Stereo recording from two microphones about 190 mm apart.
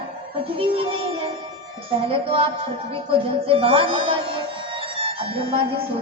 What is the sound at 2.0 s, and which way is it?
Music, 30° right (ahead or behind).